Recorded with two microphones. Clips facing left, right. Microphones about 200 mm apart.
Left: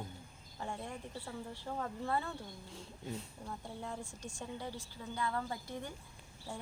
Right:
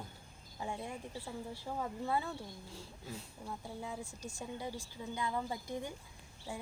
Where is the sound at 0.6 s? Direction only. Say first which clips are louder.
Right 1 dB; 10° right (ahead or behind).